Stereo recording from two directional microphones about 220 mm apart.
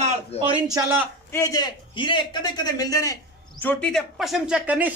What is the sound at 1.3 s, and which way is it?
A man's voice, 15° left (ahead or behind).